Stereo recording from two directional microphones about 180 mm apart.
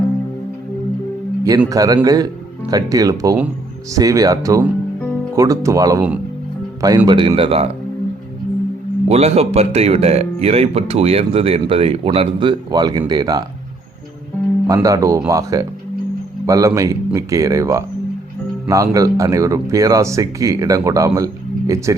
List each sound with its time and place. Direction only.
1.5 s speech: 20° right (ahead or behind)
9.0 s speech: 35° right (ahead or behind)
14.7 s speech: 20° right (ahead or behind)